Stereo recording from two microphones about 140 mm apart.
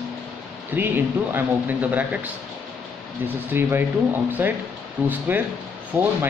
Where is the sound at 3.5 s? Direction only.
15° right (ahead or behind).